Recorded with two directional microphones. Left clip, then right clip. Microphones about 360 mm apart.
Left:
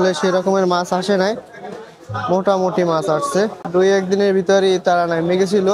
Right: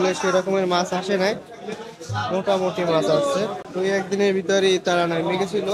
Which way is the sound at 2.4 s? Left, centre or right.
Left.